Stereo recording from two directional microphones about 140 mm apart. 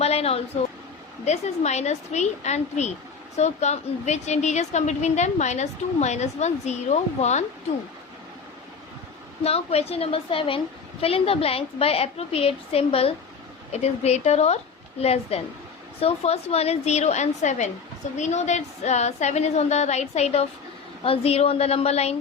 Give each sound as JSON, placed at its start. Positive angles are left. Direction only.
{"t": 0.0, "sound": "a sound", "side_deg": 45}
{"t": 1.2, "sound": "a woman's voice", "side_deg": 55}
{"t": 9.4, "sound": "a woman's voice", "side_deg": 45}